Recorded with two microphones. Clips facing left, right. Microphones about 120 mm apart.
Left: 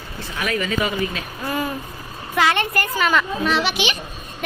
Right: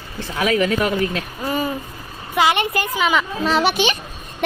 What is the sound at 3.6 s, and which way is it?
Speech, 45° right (ahead or behind).